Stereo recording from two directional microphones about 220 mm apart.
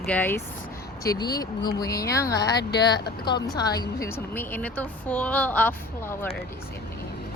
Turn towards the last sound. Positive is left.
turn(degrees=5)  # may be behind; listen again after turning